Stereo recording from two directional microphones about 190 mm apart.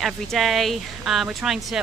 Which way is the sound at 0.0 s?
Centre (ahead or behind).